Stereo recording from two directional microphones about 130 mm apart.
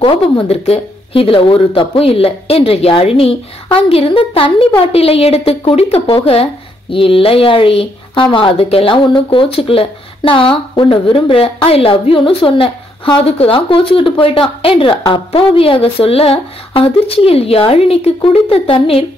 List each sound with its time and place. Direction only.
0.0 s speech: 45° left (ahead or behind)